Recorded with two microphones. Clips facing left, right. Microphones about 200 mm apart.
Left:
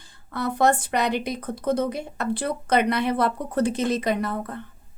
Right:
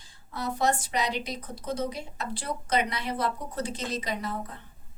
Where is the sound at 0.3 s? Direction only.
55° left (ahead or behind).